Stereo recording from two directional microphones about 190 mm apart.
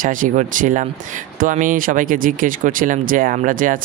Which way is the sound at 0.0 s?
45° right (ahead or behind).